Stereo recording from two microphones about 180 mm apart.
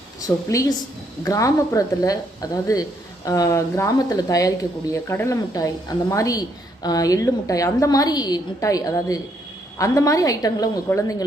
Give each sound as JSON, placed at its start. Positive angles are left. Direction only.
{"t": 0.2, "sound": "a woman's voice", "side_deg": 20}